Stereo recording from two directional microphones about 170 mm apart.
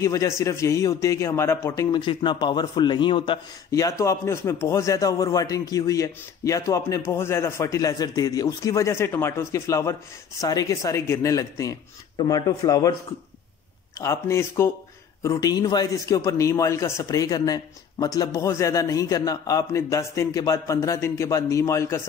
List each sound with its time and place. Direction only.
0.0 s a man's voice: 20° left (ahead or behind)
1.9 s a man's voice: 25° left (ahead or behind)
13.9 s a man's voice: 15° left (ahead or behind)